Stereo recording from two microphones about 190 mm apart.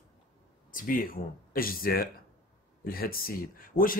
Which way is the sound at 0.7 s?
45° left (ahead or behind).